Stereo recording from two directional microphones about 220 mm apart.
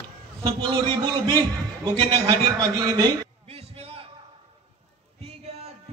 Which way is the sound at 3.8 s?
25° right (ahead or behind).